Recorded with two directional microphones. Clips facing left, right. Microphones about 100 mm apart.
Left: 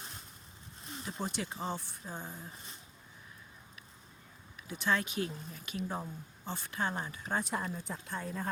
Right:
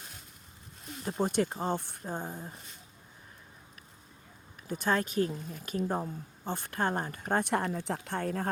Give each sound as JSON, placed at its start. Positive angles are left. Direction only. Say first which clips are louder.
{"t": 1.0, "sound": "speech", "louder": "right 9 dB", "side_deg": -45}
{"t": 4.7, "sound": "speech", "louder": "right 3 dB", "side_deg": -45}